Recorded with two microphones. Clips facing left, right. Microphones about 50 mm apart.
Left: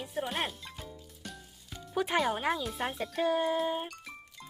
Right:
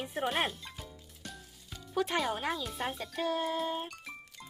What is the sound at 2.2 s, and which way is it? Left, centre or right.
A woman's voice, centre.